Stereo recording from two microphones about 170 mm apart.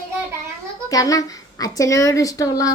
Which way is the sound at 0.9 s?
20° left (ahead or behind).